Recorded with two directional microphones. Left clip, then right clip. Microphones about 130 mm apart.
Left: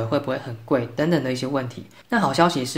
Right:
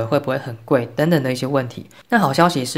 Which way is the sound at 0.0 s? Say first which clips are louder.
Right 4 dB; 45° right (ahead or behind).